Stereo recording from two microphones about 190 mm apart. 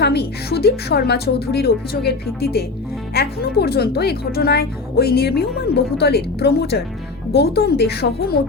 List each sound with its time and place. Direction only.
0.0 s speech: 60° left (ahead or behind)